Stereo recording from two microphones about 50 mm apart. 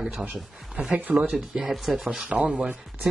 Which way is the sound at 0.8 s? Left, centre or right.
Right.